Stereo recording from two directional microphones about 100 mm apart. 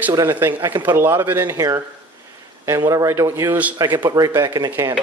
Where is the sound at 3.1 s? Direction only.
25° right (ahead or behind).